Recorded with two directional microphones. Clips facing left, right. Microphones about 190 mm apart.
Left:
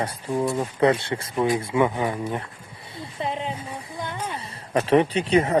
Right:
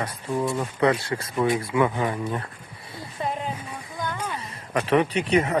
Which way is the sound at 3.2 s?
25° left (ahead or behind).